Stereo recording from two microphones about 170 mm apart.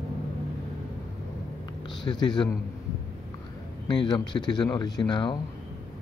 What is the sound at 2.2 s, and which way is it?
Speech, 25° left (ahead or behind).